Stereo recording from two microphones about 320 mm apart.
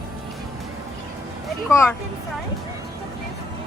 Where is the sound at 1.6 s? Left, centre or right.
Centre.